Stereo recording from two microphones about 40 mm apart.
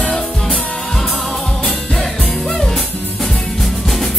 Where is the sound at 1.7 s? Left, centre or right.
Centre.